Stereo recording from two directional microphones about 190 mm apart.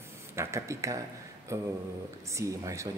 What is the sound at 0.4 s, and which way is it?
Speech, 15° right (ahead or behind).